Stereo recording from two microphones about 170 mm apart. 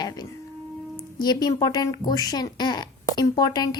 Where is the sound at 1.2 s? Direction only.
25° left (ahead or behind).